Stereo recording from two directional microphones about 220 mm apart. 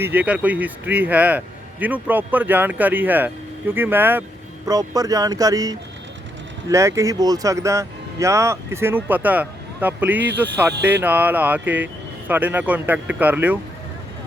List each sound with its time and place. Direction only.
0.0 s speech: 5° right (ahead or behind)